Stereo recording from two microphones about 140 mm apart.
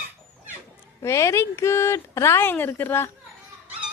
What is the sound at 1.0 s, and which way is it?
Speech, 20° left (ahead or behind).